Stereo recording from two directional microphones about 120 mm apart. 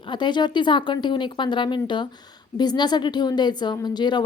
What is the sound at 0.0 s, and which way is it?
Speech, 40° left (ahead or behind).